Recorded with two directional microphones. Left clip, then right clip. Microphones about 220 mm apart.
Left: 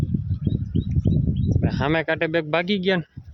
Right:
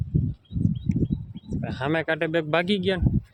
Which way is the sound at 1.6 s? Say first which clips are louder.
Left 3 dB; 10° left (ahead or behind).